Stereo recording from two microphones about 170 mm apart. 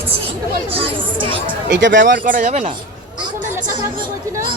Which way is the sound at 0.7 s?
30° right (ahead or behind).